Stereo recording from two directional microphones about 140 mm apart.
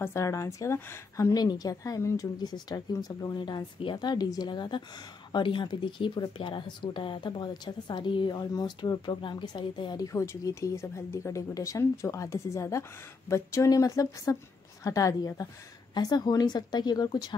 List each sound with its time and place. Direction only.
0.0 s a woman's voice: 20° left (ahead or behind)